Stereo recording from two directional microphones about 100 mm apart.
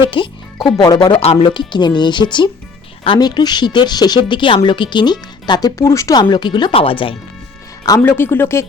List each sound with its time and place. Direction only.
0.0 s a woman's voice: 55° left (ahead or behind)
1.2 s speech: 80° left
1.5 s a woman's voice: 50° left (ahead or behind); by 6.1 s 30° left (ahead or behind)
6.1 s a woman's voice: 50° left (ahead or behind)
6.7 s speech: 65° left (ahead or behind)
8.0 s speech: 20° left (ahead or behind)